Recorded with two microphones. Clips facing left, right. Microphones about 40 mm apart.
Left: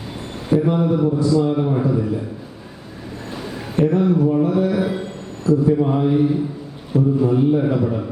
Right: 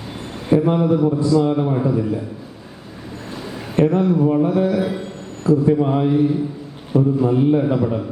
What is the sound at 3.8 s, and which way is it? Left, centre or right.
Speech, right.